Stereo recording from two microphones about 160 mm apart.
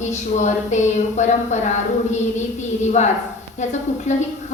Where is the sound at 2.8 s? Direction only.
45° left (ahead or behind).